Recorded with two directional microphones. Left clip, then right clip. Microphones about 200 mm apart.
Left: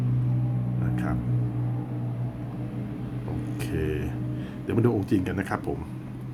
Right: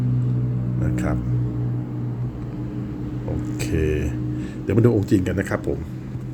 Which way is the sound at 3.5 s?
15° right (ahead or behind).